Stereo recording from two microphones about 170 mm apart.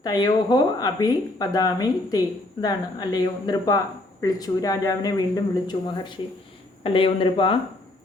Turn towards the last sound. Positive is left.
turn(degrees=30)  # may be behind; listen again after turning